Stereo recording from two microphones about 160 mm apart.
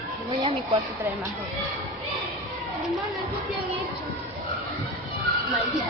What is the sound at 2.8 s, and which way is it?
Speech, centre (ahead or behind).